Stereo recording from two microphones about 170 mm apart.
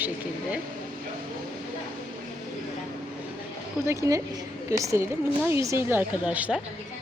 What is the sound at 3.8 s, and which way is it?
A woman's voice, 15° right (ahead or behind).